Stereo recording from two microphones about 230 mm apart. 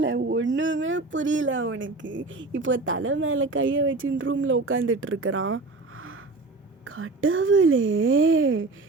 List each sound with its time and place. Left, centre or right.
0.0 s speech: right